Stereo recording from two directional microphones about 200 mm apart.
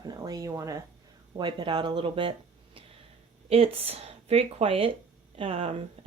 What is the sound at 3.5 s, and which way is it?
Speech, 30° right (ahead or behind).